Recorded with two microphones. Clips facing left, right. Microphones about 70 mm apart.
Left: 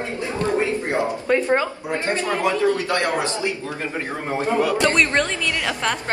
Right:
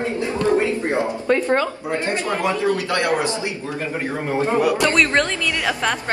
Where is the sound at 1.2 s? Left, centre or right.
Centre.